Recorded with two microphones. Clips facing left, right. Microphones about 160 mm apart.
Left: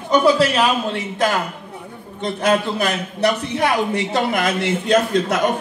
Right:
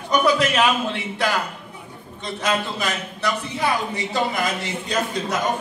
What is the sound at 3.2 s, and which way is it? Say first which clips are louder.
A man's voice: left 7 dB; 70° left (ahead or behind).